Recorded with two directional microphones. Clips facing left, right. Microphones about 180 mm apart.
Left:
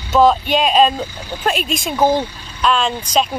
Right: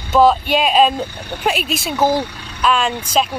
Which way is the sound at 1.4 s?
5° right (ahead or behind).